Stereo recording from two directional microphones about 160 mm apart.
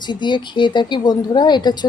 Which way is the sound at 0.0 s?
30° left (ahead or behind).